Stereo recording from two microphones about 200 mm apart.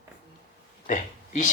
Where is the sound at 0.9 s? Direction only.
40° left (ahead or behind).